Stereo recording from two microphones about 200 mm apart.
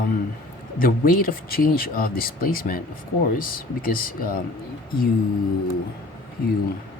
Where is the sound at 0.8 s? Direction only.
45° left (ahead or behind).